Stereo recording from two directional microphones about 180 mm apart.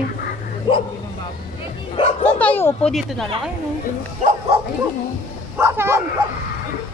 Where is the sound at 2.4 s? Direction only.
10° left (ahead or behind).